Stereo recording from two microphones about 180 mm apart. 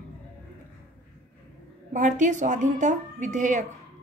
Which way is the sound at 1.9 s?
45° right (ahead or behind).